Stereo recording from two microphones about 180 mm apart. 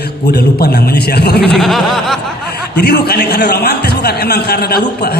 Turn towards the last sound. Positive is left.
turn(degrees=60)  # may be behind; listen again after turning